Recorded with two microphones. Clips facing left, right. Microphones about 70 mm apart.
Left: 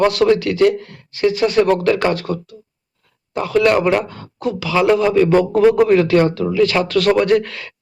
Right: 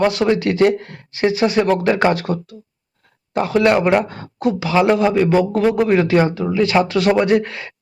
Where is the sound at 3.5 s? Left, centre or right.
Right.